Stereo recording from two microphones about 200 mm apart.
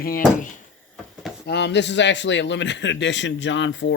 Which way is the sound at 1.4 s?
55° left (ahead or behind).